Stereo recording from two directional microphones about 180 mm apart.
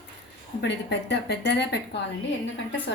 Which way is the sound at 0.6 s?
75° left (ahead or behind).